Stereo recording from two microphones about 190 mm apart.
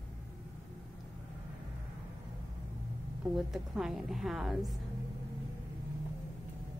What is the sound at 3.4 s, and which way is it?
A woman's voice, centre (ahead or behind).